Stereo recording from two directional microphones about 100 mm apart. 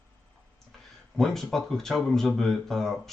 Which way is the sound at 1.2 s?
5° left (ahead or behind).